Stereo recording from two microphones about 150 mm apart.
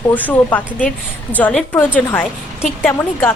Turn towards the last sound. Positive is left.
turn(degrees=15)  # may be behind; listen again after turning